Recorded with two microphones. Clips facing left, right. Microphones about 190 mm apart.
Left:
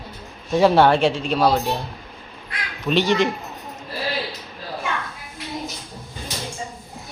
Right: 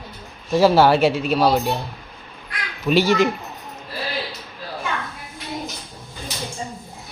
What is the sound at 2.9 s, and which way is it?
Speech, 5° right (ahead or behind).